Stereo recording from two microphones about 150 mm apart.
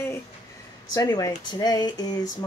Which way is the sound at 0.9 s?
25° left (ahead or behind).